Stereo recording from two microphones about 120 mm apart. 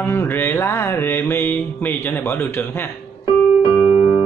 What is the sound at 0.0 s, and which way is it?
Mantra, 20° left (ahead or behind).